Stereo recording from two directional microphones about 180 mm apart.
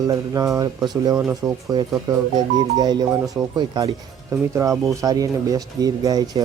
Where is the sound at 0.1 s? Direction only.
20° right (ahead or behind).